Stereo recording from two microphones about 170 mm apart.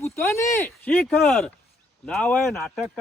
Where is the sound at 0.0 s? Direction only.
15° left (ahead or behind).